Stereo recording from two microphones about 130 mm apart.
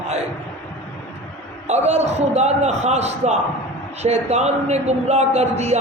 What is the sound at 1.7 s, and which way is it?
A man's voice, 60° right (ahead or behind).